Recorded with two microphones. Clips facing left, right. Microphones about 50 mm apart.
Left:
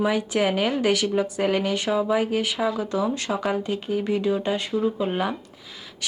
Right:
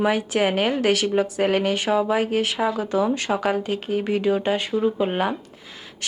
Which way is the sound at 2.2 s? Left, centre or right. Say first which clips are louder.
Right 2 dB; right.